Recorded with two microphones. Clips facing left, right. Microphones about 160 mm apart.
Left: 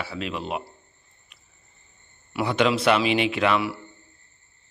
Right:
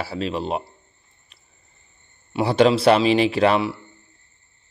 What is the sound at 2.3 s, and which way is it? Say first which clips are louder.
Speech: right 5 dB; 35° right (ahead or behind).